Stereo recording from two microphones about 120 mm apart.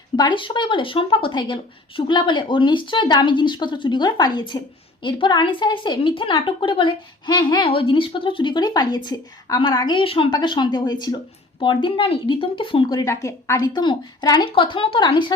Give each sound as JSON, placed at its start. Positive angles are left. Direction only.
{"t": 0.2, "sound": "a woman's voice", "side_deg": 45}
{"t": 10.0, "sound": "a woman's voice", "side_deg": 50}
{"t": 13.2, "sound": "a woman's voice", "side_deg": 25}
{"t": 13.7, "sound": "a woman's voice", "side_deg": 35}